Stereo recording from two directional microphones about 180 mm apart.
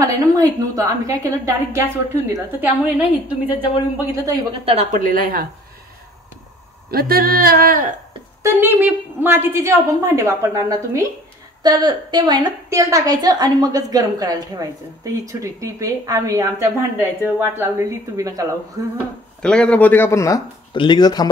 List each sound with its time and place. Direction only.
0.0 s a woman's voice: 20° right (ahead or behind)
4.6 s a woman's voice: 40° right (ahead or behind)
6.9 s speech: 55° right (ahead or behind)
8.4 s a woman's voice: 15° right (ahead or behind)
19.4 s speech: 5° left (ahead or behind); by 21.3 s 20° left (ahead or behind)